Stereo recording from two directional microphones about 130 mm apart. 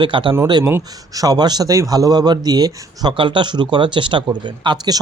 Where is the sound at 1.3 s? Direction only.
30° right (ahead or behind).